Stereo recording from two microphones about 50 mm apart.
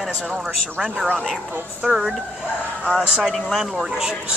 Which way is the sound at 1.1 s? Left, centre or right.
Centre.